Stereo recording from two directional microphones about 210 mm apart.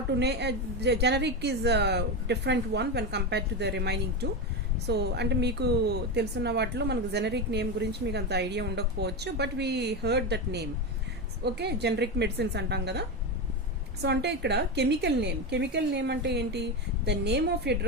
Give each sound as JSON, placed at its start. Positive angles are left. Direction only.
{"t": 0.2, "sound": "a woman's voice", "side_deg": -55}